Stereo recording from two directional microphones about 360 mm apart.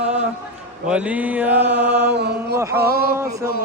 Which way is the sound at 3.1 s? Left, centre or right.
Centre.